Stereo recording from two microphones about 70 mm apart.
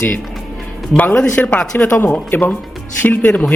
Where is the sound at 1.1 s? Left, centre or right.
Centre.